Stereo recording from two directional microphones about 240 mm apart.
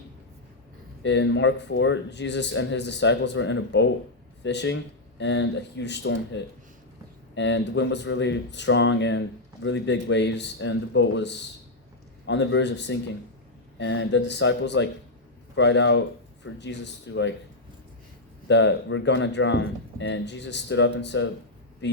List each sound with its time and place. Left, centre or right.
1.0 s a man's voice: left
18.4 s a man's voice: left